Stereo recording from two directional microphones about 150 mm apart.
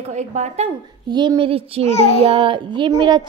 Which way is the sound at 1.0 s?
30° right (ahead or behind).